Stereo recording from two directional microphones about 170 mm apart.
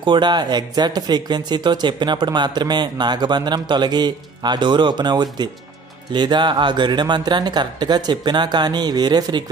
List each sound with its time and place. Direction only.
0.0 s speech: 25° right (ahead or behind)